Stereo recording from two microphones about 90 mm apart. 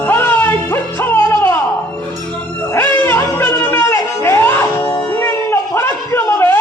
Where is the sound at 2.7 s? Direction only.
25° left (ahead or behind).